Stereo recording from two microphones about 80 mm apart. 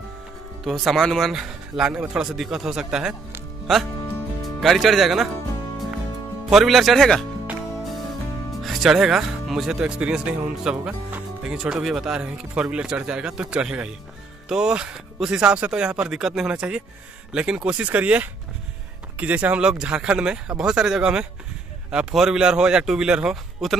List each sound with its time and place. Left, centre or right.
0.7 s a man's voice: centre
3.7 s a man's voice: centre
6.5 s a man's voice: centre
8.6 s speech: centre; by 11.2 s right
11.4 s a man's voice: centre